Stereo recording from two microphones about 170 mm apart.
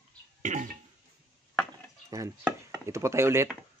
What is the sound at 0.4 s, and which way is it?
Cough, 45° right (ahead or behind).